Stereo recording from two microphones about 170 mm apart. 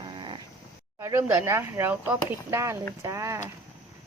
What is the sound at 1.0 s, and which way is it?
Speech, 15° right (ahead or behind).